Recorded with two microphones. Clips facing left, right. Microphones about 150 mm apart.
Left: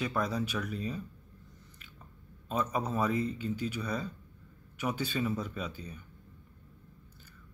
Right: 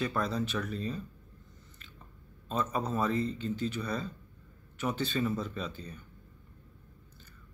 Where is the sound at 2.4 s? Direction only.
10° left (ahead or behind).